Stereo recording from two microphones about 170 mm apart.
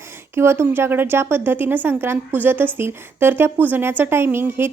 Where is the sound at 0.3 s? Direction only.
15° right (ahead or behind).